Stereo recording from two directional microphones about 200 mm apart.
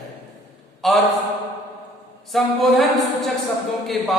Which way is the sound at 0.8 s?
Centre (ahead or behind).